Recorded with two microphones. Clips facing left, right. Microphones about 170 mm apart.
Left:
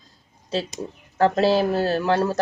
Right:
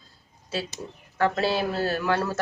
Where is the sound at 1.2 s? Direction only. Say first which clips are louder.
Left 6 dB; 30° left (ahead or behind).